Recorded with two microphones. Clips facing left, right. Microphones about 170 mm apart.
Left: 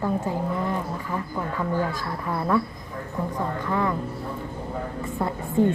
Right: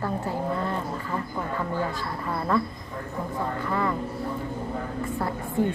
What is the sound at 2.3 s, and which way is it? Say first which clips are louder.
Speech: left 2 dB; 10° left (ahead or behind).